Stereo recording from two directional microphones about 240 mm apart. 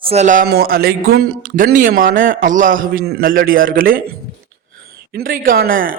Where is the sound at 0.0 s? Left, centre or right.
Right.